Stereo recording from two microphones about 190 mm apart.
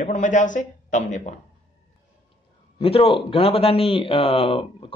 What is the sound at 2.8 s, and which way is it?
A man's voice, 30° left (ahead or behind).